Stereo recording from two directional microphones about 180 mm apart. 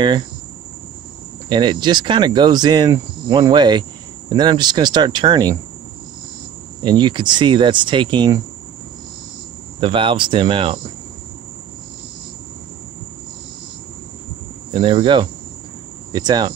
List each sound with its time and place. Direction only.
1.5 s speech: 25° right (ahead or behind)
6.8 s speech: 25° right (ahead or behind)
9.8 s speech: 30° right (ahead or behind)
14.7 s speech: 30° right (ahead or behind)